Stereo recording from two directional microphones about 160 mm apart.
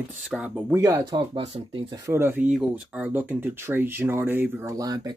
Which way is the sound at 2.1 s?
15° right (ahead or behind).